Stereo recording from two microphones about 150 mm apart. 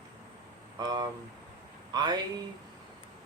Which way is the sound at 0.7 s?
25° right (ahead or behind).